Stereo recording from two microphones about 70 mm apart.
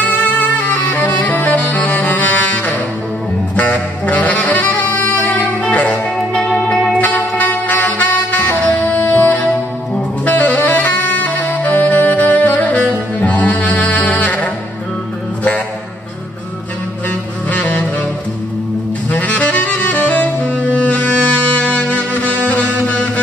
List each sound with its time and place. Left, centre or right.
0.0 s music: left
3.5 s saxophone: centre
6.9 s music: left
10.2 s saxophone: left
13.2 s music: left
17.5 s saxophone: left
19.0 s saxophone: left